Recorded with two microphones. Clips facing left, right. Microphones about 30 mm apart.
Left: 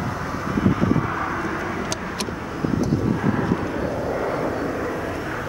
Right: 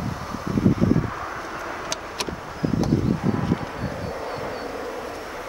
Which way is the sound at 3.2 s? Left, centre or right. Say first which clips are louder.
Left 3 dB; left.